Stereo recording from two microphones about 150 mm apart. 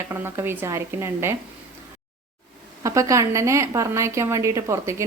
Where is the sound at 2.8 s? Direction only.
20° right (ahead or behind).